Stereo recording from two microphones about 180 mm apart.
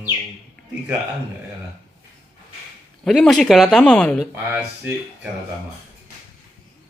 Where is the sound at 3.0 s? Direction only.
Centre (ahead or behind).